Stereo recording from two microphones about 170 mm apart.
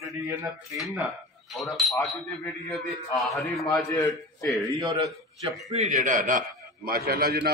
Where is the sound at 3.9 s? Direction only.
15° left (ahead or behind).